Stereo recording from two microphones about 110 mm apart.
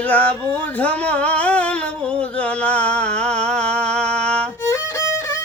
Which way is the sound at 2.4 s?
10° left (ahead or behind).